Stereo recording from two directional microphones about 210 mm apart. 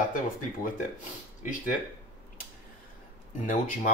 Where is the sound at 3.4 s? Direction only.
40° left (ahead or behind).